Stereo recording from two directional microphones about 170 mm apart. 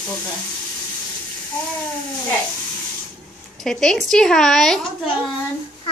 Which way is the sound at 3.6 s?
5° left (ahead or behind).